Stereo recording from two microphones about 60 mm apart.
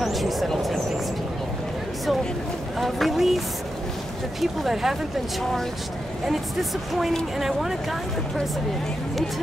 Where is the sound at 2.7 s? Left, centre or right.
Centre.